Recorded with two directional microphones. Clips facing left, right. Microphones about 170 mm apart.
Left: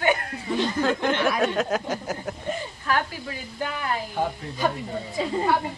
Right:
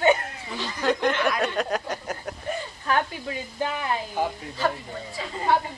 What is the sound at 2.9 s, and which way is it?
A woman's voice, 25° right (ahead or behind).